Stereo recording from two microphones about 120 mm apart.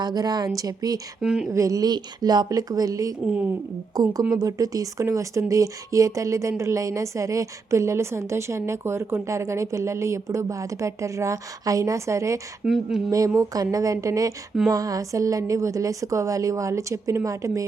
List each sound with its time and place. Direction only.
0.0 s a woman's voice: 35° right (ahead or behind)
1.2 s speech: 5° right (ahead or behind)
1.5 s a woman's voice: 30° right (ahead or behind)
12.6 s speech: 5° right (ahead or behind)
13.1 s speech: 25° right (ahead or behind)